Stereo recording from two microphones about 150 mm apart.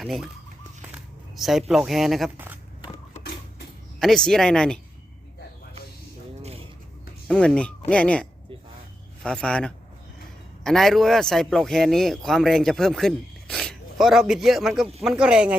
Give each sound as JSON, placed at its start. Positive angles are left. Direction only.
{"t": 0.0, "sound": "a man's voice", "side_deg": 0}
{"t": 1.4, "sound": "a man's voice", "side_deg": 0}
{"t": 4.0, "sound": "a man's voice", "side_deg": 5}
{"t": 6.4, "sound": "a sound", "side_deg": -40}
{"t": 7.3, "sound": "a man's voice", "side_deg": 5}